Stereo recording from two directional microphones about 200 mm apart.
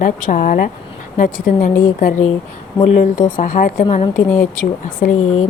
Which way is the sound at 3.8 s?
30° left (ahead or behind).